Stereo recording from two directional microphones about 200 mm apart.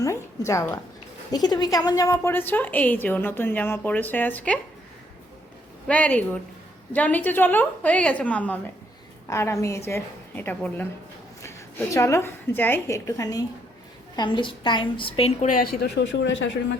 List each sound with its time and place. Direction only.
0.0 s a woman's voice: 15° left (ahead or behind)
5.9 s a woman's voice: 5° left (ahead or behind)
11.9 s a woman's voice: 15° left (ahead or behind); by 16.6 s 65° left (ahead or behind)